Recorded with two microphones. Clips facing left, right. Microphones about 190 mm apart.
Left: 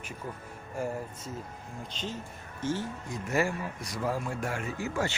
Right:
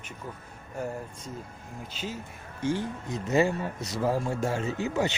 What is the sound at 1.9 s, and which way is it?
Speech, 5° right (ahead or behind).